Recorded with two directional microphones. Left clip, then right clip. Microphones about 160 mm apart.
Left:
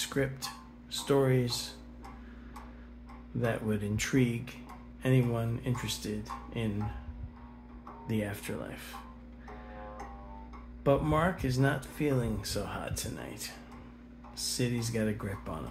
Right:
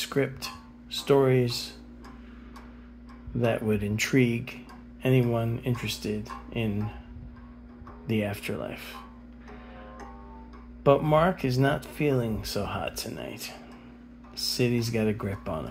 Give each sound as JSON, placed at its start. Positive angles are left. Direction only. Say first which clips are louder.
{"t": 0.0, "sound": "speech", "louder": "right 5 dB", "side_deg": -20}
{"t": 3.3, "sound": "speech", "louder": "right 6 dB", "side_deg": -20}
{"t": 8.1, "sound": "speech", "louder": "right 6 dB", "side_deg": -20}
{"t": 10.8, "sound": "speech", "louder": "right 7 dB", "side_deg": -20}